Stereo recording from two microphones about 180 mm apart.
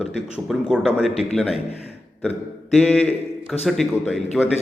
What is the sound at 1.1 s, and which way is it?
Speech, 35° left (ahead or behind).